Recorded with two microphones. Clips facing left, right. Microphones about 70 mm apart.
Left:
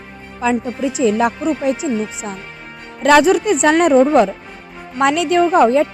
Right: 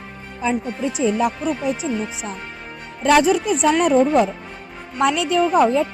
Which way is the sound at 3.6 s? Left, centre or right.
Left.